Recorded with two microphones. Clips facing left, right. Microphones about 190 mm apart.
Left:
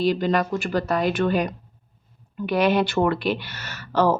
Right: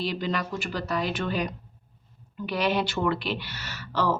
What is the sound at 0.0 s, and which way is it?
Speech, 50° left (ahead or behind).